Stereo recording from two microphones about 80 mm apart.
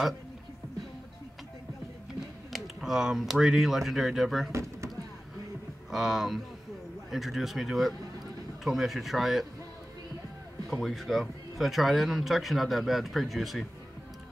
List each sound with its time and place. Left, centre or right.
2.1 s speech: centre
4.5 s a sound: right
5.9 s speech: centre
10.7 s speech: centre